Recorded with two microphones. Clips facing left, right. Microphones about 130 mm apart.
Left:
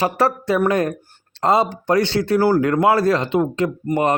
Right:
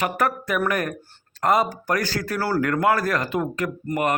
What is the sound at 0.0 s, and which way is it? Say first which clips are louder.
Speech: left 5 dB; 30° left (ahead or behind).